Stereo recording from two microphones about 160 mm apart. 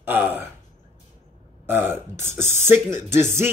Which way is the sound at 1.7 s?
15° right (ahead or behind).